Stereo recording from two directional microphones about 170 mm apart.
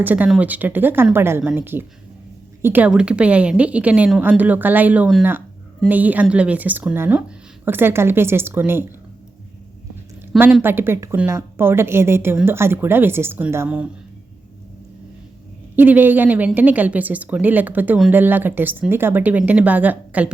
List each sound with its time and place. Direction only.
0.0 s a woman's voice: 10° right (ahead or behind)
10.3 s a woman's voice: 10° right (ahead or behind)
15.7 s a woman's voice: 10° right (ahead or behind)